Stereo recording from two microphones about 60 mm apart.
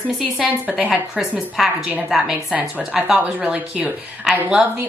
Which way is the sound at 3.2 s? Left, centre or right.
Right.